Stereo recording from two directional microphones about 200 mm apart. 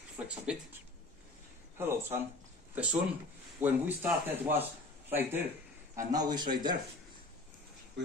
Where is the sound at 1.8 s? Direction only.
10° right (ahead or behind).